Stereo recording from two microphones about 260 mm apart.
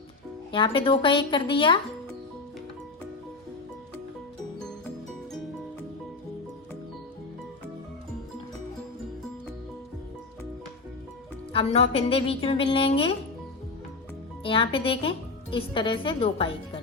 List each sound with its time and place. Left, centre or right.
0.5 s speech: centre
11.5 s speech: left
14.4 s speech: centre